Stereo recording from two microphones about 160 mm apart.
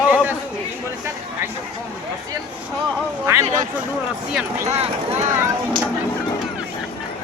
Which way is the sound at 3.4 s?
55° right (ahead or behind).